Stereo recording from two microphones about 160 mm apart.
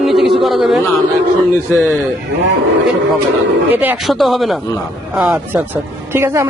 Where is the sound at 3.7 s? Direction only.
10° right (ahead or behind).